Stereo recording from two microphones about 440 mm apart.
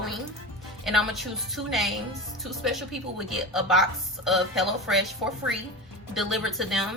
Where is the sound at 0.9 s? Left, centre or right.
Centre.